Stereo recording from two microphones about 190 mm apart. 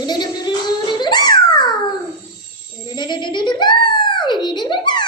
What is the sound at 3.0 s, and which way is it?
Giggle, 25° left (ahead or behind).